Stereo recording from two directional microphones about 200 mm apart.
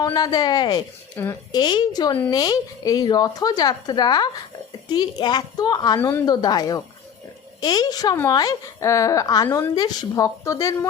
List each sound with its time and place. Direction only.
0.0 s a woman's voice: 20° left (ahead or behind)